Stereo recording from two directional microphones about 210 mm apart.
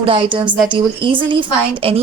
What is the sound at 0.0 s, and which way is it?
A woman's voice, 25° right (ahead or behind).